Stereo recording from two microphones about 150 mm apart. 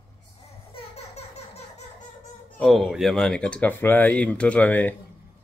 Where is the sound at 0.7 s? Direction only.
45° left (ahead or behind).